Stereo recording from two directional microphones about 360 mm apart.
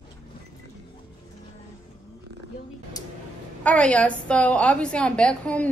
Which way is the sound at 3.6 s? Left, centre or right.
Centre.